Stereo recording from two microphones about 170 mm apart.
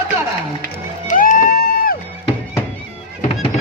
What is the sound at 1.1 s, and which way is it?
Music, 50° left (ahead or behind).